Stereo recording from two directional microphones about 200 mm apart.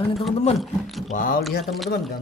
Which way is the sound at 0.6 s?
Centre (ahead or behind).